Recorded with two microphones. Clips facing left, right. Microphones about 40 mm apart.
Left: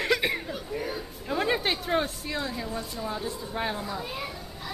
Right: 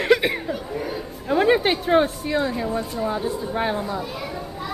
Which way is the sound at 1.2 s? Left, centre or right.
Centre.